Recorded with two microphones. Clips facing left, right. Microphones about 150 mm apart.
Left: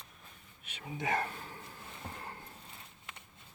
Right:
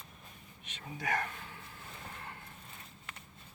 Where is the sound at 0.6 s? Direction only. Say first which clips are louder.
Left 2 dB; 10° left (ahead or behind).